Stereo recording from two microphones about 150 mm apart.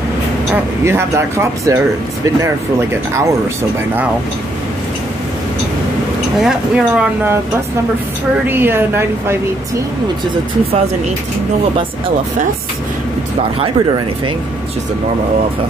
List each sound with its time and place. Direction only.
0.8 s speech: 20° right (ahead or behind)
6.4 s speech: 5° right (ahead or behind)
8.5 s speech: 15° right (ahead or behind)
13.6 s speech: 35° right (ahead or behind)